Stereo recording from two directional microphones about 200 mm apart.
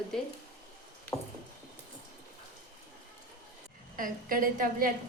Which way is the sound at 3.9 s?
45° right (ahead or behind).